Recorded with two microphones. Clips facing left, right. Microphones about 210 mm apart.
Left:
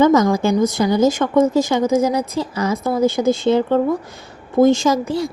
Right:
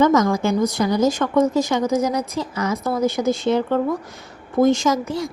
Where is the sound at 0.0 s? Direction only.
30° left (ahead or behind).